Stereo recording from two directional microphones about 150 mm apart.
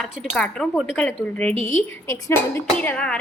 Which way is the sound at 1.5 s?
55° left (ahead or behind).